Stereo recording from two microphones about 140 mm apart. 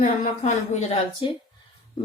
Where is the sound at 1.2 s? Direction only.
35° left (ahead or behind).